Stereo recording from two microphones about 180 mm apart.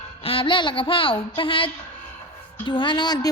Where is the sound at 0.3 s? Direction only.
30° left (ahead or behind).